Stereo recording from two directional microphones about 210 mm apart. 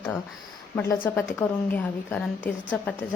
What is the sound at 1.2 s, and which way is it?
Speech, 10° left (ahead or behind).